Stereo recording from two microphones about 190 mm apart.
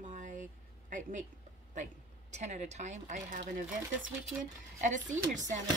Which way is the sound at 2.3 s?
40° right (ahead or behind).